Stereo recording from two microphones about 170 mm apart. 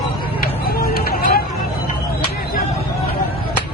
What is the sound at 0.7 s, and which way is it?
Vehicle, 65° left (ahead or behind).